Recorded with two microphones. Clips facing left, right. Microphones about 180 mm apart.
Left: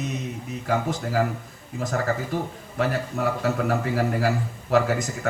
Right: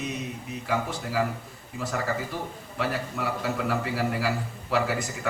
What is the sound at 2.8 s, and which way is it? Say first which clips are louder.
A man's voice: left 5 dB; 45° left (ahead or behind).